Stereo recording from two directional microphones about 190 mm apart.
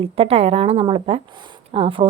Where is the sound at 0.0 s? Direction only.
30° right (ahead or behind).